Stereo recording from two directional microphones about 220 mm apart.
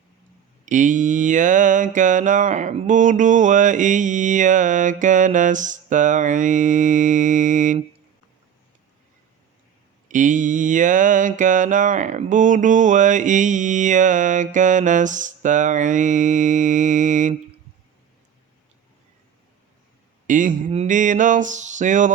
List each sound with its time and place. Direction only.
0.6 s music: 35° right (ahead or behind)
10.1 s music: 35° right (ahead or behind)
20.2 s speech: 35° right (ahead or behind)
20.6 s music: 30° right (ahead or behind)